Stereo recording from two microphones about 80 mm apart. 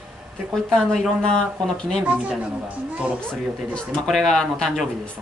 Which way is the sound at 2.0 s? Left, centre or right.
Centre.